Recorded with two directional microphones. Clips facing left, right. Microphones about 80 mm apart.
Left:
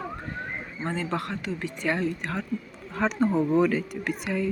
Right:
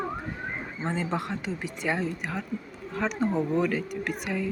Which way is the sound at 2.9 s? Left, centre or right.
Centre.